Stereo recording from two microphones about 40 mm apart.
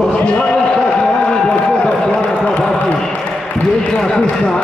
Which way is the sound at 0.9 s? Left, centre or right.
Centre.